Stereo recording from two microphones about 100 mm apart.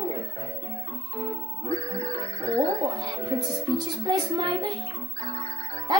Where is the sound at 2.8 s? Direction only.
40° right (ahead or behind).